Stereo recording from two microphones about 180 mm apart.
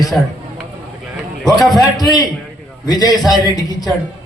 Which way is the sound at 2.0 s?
20° left (ahead or behind).